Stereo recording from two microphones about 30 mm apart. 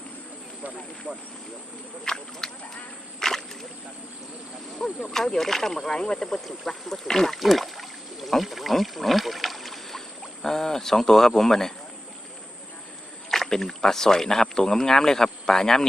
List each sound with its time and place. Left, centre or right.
1.1 s speech: right
2.0 s speech: left
3.2 s rowboat: centre
5.0 s speech: centre
6.2 s speech: centre
7.3 s rowboat: centre
10.4 s speech: centre
13.3 s speech: centre